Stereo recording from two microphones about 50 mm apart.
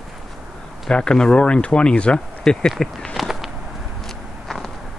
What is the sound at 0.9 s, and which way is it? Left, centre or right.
Speech, centre.